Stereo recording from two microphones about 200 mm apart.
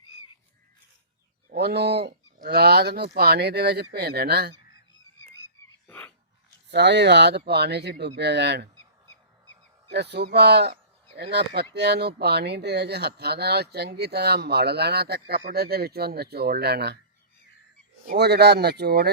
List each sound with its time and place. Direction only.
1.5 s speech: 55° right (ahead or behind)
6.7 s speech: 60° right (ahead or behind)
9.9 s speech: 55° right (ahead or behind)
18.0 s speech: 55° right (ahead or behind)